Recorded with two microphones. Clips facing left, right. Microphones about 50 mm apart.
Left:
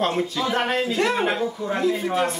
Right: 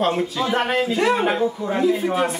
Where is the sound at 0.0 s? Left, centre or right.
Centre.